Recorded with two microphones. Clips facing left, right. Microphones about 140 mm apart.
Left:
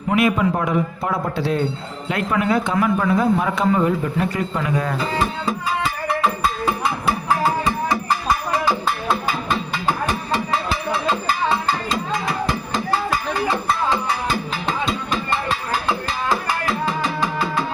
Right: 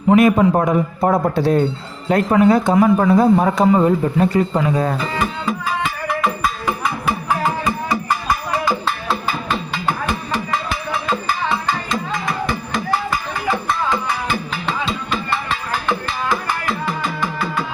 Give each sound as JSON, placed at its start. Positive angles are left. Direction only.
{"t": 0.2, "sound": "a man's voice", "side_deg": -40}
{"t": 11.4, "sound": "music", "side_deg": 35}
{"t": 15.9, "sound": "music", "side_deg": 35}